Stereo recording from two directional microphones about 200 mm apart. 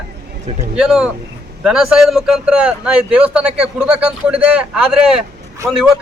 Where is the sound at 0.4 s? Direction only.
35° right (ahead or behind).